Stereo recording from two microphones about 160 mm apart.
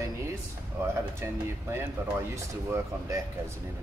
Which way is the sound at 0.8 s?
15° right (ahead or behind).